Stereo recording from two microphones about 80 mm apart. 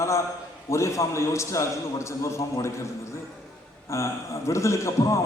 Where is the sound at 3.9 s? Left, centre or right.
Left.